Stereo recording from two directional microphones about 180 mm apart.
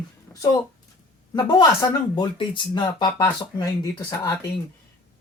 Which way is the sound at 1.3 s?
20° left (ahead or behind).